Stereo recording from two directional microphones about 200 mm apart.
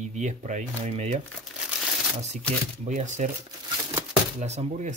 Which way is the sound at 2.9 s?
40° right (ahead or behind).